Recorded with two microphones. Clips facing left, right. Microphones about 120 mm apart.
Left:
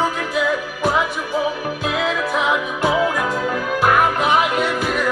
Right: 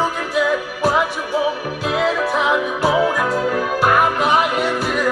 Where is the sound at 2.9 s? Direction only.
40° right (ahead or behind).